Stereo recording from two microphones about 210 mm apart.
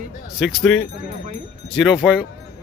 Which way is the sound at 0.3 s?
Centre (ahead or behind).